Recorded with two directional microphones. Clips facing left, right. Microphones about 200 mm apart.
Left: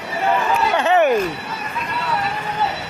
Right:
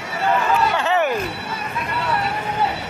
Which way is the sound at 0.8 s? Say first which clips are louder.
Left 4 dB; 20° left (ahead or behind).